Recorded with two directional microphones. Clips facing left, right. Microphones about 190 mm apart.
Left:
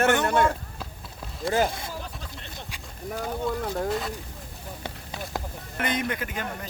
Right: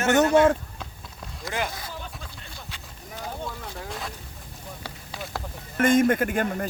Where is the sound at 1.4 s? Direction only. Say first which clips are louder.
Left 6 dB; 40° left (ahead or behind).